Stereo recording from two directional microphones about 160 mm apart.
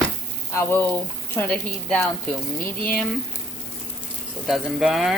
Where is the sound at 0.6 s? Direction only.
15° left (ahead or behind).